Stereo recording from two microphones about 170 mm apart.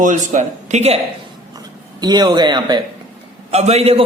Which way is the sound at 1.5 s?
25° right (ahead or behind).